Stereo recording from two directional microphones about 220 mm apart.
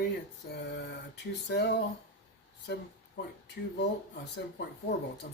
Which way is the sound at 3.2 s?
50° left (ahead or behind).